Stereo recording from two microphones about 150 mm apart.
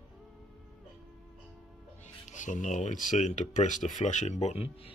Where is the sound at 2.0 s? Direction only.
55° left (ahead or behind).